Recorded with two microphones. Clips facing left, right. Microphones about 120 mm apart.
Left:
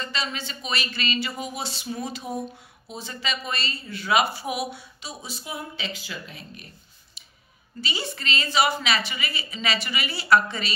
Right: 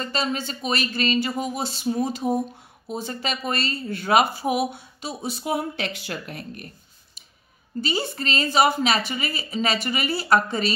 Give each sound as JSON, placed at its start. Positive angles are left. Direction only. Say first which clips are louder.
{"t": 0.0, "sound": "speech", "louder": "right 5 dB", "side_deg": -45}
{"t": 7.2, "sound": "clicking", "louder": "left 1 dB", "side_deg": -45}
{"t": 7.8, "sound": "speech", "louder": "right 5 dB", "side_deg": -45}